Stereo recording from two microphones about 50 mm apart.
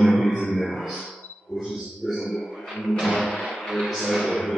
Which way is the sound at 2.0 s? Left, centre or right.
Centre.